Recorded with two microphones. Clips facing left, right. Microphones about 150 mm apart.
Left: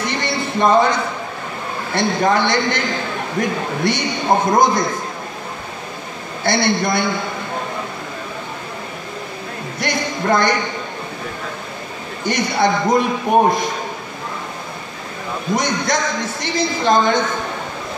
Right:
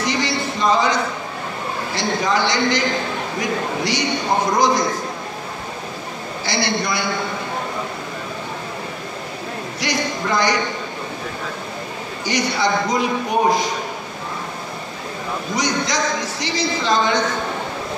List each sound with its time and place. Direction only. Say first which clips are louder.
0.0 s a sound: even; 55° left (ahead or behind)
2.0 s a man's voice: left 4 dB; 55° left (ahead or behind)
6.4 s a man's voice: left 5 dB; 50° left (ahead or behind)
9.8 s a sound: left 2 dB; 50° left (ahead or behind)
12.3 s a man's voice: left 3 dB; 50° left (ahead or behind)
15.5 s a man's voice: left 3 dB; 50° left (ahead or behind)